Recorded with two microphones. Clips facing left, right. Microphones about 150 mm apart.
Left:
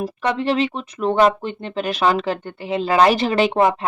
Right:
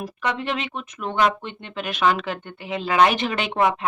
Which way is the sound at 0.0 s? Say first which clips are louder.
Left 5 dB; 30° left (ahead or behind).